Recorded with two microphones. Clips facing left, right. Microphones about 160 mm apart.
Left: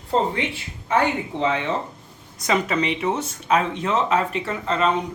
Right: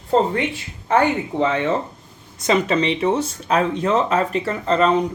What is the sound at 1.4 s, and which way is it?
Speech, 50° right (ahead or behind).